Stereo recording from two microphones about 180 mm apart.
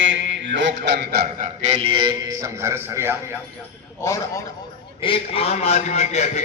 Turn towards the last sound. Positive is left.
turn(degrees=35)  # may be behind; listen again after turning